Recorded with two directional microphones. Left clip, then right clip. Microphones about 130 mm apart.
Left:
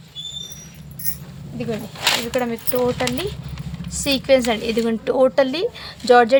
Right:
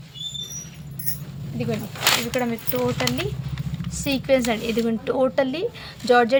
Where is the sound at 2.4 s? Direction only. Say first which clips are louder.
Left 3 dB; 40° left (ahead or behind).